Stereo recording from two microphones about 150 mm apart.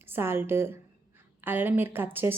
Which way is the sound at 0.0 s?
15° right (ahead or behind).